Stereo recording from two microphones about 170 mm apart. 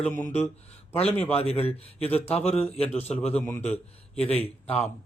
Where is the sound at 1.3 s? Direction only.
35° left (ahead or behind).